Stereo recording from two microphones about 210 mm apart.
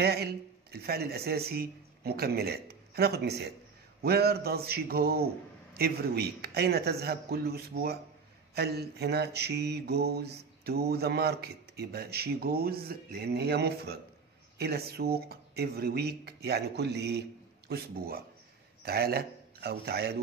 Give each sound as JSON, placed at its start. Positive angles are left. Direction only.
{"t": 0.0, "sound": "mantra", "side_deg": -50}
{"t": 1.5, "sound": "speech", "side_deg": -50}
{"t": 4.0, "sound": "mantra", "side_deg": -50}
{"t": 18.8, "sound": "speech", "side_deg": -50}